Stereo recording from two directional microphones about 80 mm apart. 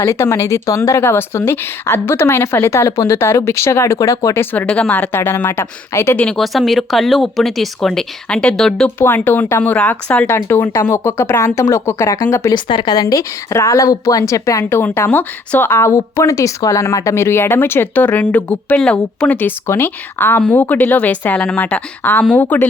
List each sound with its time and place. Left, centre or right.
0.0 s speech: left
4.4 s a woman's voice: centre
6.3 s speech: centre
9.0 s a woman's voice: left
12.5 s a woman's voice: left
13.5 s speech: left
14.6 s a woman's voice: left